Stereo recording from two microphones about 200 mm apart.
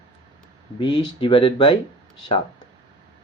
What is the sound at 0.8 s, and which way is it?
Speech, 25° left (ahead or behind).